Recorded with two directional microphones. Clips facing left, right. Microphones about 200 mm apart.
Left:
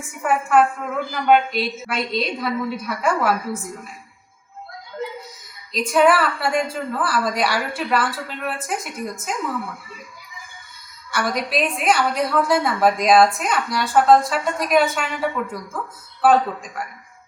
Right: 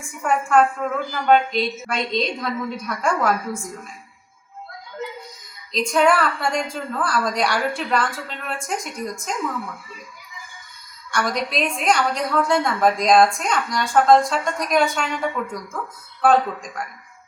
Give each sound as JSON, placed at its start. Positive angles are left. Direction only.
{"t": 0.2, "sound": "a woman's voice", "side_deg": 5}
{"t": 5.7, "sound": "a woman's voice", "side_deg": 5}
{"t": 11.1, "sound": "a woman's voice", "side_deg": 5}